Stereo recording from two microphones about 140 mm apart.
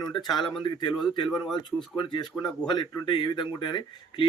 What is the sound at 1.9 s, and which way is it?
Speech, 35° left (ahead or behind).